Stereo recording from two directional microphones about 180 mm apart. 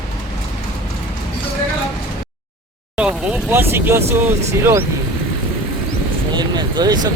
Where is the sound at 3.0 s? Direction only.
5° right (ahead or behind).